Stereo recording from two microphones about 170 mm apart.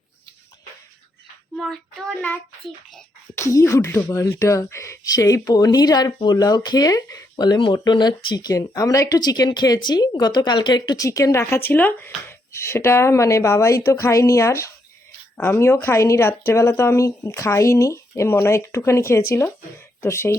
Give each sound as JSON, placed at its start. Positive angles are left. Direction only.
{"t": 1.5, "sound": "child singing", "side_deg": 0}
{"t": 3.3, "sound": "speech", "side_deg": 15}